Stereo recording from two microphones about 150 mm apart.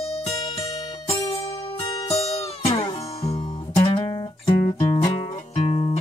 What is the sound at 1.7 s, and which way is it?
Music, 30° left (ahead or behind).